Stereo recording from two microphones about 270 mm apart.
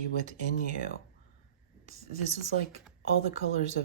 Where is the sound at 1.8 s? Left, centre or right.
Right.